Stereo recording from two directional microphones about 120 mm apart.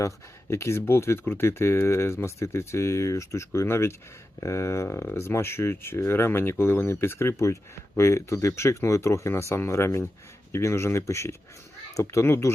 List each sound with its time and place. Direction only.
0.5 s speech: 20° left (ahead or behind)